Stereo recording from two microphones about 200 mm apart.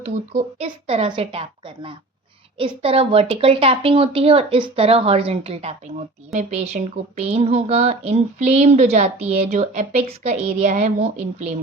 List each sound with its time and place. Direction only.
0.0 s a woman's voice: 35° right (ahead or behind)